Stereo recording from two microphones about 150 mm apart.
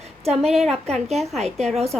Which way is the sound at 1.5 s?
5° left (ahead or behind).